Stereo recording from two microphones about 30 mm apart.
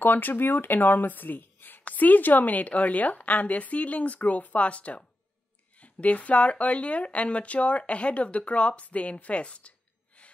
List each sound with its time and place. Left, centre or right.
0.0 s a woman's voice: left
1.9 s a woman's voice: left
8.9 s a sound: left